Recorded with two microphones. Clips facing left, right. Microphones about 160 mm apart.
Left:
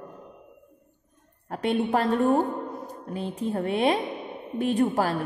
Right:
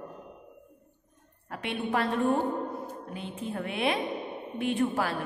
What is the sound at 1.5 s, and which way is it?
Speech, 35° left (ahead or behind).